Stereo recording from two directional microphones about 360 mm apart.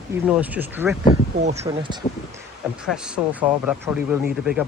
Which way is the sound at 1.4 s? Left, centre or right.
Centre.